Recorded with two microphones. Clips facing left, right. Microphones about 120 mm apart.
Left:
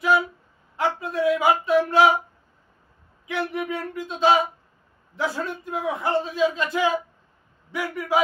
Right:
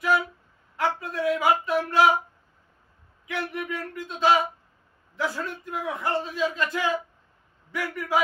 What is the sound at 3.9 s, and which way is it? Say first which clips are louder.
Speech: left 2 dB; 25° left (ahead or behind).